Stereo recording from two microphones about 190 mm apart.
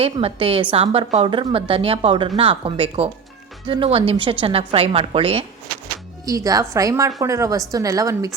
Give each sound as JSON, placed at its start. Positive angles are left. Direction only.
{"t": 0.0, "sound": "a woman's voice", "side_deg": -30}
{"t": 6.2, "sound": "a woman's voice", "side_deg": -20}